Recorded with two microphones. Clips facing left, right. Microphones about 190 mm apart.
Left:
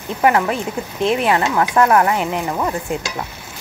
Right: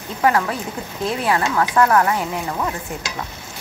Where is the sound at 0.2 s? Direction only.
20° left (ahead or behind).